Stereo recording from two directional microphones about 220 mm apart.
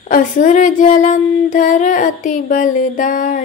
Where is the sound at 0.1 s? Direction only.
35° left (ahead or behind).